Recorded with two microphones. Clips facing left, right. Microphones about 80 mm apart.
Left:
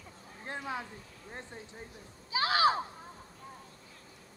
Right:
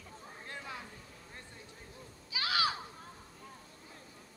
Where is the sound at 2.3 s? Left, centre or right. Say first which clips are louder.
Left 7 dB; left.